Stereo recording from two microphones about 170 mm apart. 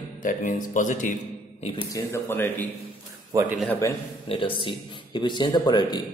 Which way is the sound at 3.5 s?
10° left (ahead or behind).